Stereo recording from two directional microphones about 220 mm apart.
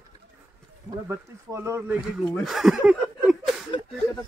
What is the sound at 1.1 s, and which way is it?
Speech, 10° right (ahead or behind).